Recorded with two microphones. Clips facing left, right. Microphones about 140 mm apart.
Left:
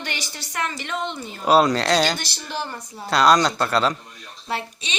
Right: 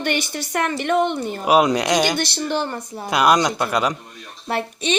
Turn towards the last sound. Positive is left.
turn(degrees=-55)  # may be behind; listen again after turning